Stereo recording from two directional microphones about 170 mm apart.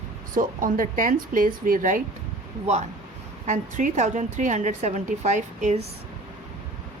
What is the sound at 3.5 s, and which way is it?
A woman's voice, 45° right (ahead or behind).